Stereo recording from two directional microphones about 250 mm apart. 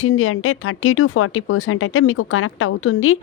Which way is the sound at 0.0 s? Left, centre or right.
Left.